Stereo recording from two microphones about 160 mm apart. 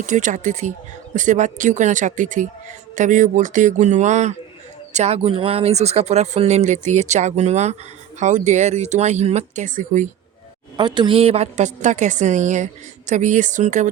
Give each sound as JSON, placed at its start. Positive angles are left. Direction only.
{"t": 0.0, "sound": "a woman's voice", "side_deg": -50}
{"t": 10.8, "sound": "a woman's voice", "side_deg": -30}